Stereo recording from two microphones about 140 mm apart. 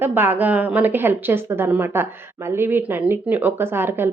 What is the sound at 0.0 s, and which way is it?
Speech, 15° right (ahead or behind).